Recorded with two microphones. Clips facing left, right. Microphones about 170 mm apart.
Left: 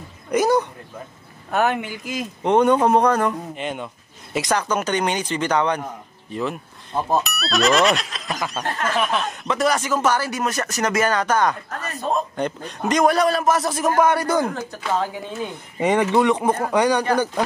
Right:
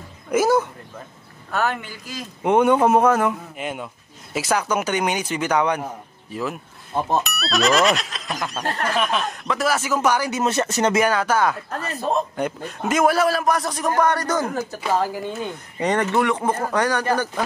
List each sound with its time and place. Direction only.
0.3 s a man's voice: 5° right (ahead or behind)
1.5 s speech: 20° left (ahead or behind)
2.4 s a man's voice: 10° right (ahead or behind)
10.4 s speech: 25° right (ahead or behind)
11.0 s a man's voice: 10° right (ahead or behind); by 14.5 s 10° left (ahead or behind)
14.5 s a man's voice: 10° right (ahead or behind)
15.8 s speech: 10° left (ahead or behind)